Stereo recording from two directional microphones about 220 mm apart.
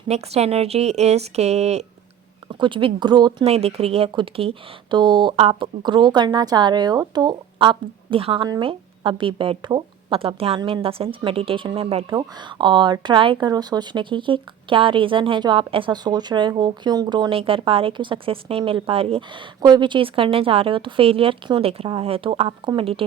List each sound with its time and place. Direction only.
0.1 s speech: 30° right (ahead or behind)